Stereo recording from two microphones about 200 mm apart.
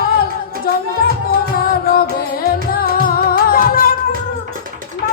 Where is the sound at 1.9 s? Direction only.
45° left (ahead or behind).